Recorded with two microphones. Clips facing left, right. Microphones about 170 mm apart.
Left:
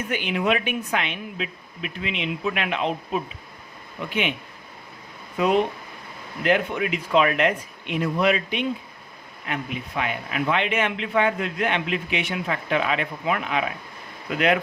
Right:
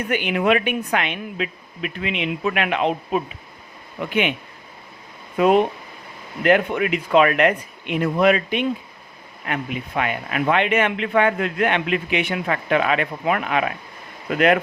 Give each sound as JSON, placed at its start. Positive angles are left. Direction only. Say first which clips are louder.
{"t": 0.1, "sound": "speech", "louder": "right 5 dB", "side_deg": -60}
{"t": 6.4, "sound": "speech", "louder": "right 4 dB", "side_deg": -60}